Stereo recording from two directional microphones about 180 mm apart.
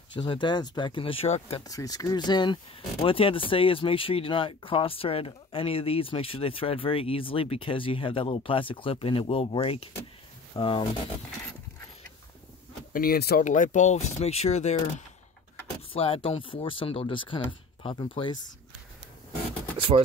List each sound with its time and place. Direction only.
0.1 s speech: 25° left (ahead or behind)
1.6 s speech: 20° left (ahead or behind)
12.9 s speech: 55° left (ahead or behind)
13.4 s speech: 45° left (ahead or behind)
15.9 s speech: 30° left (ahead or behind)